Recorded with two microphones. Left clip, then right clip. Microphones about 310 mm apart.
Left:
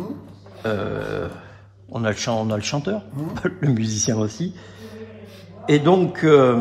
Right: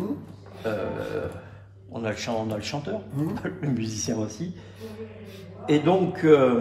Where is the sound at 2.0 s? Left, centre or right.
Left.